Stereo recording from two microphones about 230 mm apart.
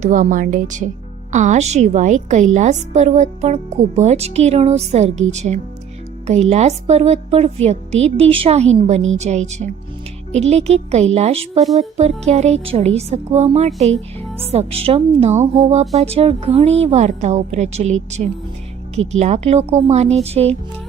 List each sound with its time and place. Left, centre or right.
0.0 s a woman's voice: right